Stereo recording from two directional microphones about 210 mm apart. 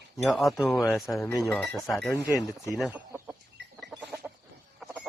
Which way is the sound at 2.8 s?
5° right (ahead or behind).